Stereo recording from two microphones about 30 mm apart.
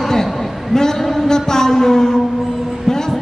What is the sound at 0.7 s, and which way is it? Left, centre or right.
A woman's voice, centre.